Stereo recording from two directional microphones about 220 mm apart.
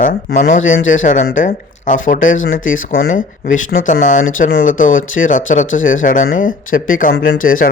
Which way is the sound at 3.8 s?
35° left (ahead or behind).